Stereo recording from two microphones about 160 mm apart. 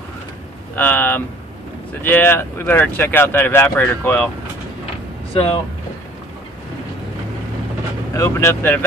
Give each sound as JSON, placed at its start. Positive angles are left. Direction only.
{"t": 0.7, "sound": "speech", "side_deg": 10}
{"t": 5.3, "sound": "speech", "side_deg": 35}
{"t": 8.1, "sound": "speech", "side_deg": 20}